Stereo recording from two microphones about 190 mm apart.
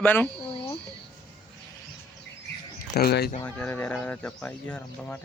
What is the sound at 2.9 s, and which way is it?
Speech, 60° left (ahead or behind).